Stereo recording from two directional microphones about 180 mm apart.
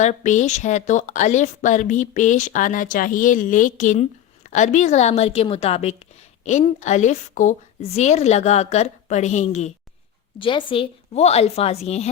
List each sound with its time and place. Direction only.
0.0 s a woman's voice: 40° left (ahead or behind)
10.3 s a woman's voice: 30° left (ahead or behind)